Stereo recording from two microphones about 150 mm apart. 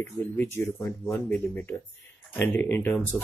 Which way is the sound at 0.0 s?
15° left (ahead or behind).